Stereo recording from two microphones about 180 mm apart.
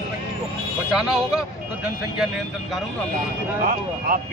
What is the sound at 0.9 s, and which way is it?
Speech, 5° right (ahead or behind).